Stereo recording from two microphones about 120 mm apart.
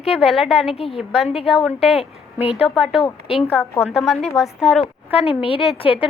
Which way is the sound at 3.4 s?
20° left (ahead or behind).